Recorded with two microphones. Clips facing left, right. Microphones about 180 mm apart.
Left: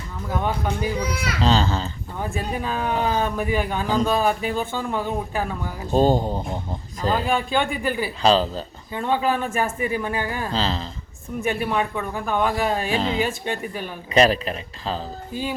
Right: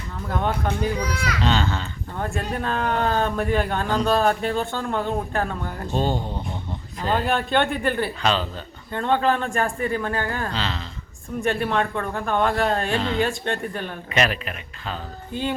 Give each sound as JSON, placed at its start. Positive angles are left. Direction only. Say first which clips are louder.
{"t": 0.3, "sound": "speech", "louder": "even", "side_deg": 5}
{"t": 1.4, "sound": "speech", "louder": "left 4 dB", "side_deg": 35}
{"t": 2.1, "sound": "speech", "louder": "even", "side_deg": 5}
{"t": 5.9, "sound": "speech", "louder": "left 7 dB", "side_deg": 40}
{"t": 7.1, "sound": "speech", "louder": "even", "side_deg": 0}
{"t": 8.2, "sound": "speech", "louder": "left 10 dB", "side_deg": 35}
{"t": 8.9, "sound": "speech", "louder": "right 1 dB", "side_deg": 10}
{"t": 10.5, "sound": "speech", "louder": "left 4 dB", "side_deg": 35}
{"t": 11.3, "sound": "speech", "louder": "right 1 dB", "side_deg": 5}
{"t": 14.1, "sound": "speech", "louder": "left 6 dB", "side_deg": 35}
{"t": 15.3, "sound": "speech", "louder": "right 2 dB", "side_deg": 5}